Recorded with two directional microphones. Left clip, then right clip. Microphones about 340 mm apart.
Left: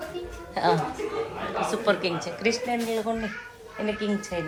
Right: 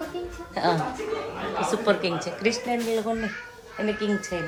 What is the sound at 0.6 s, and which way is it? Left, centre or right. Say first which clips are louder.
A woman's voice: left 1 dB; centre.